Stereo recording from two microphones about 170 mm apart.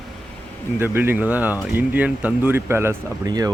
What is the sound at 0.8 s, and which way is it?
Speech, 15° right (ahead or behind).